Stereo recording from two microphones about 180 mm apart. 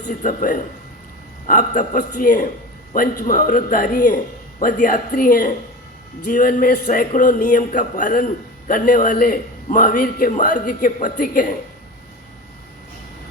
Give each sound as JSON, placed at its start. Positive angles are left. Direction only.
{"t": 0.1, "sound": "a man's voice", "side_deg": 45}